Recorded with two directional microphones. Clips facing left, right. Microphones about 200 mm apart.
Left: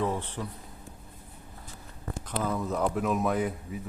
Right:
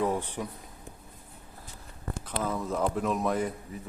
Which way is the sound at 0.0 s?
15° right (ahead or behind).